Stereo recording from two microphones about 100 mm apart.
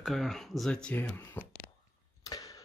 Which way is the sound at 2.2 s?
35° left (ahead or behind).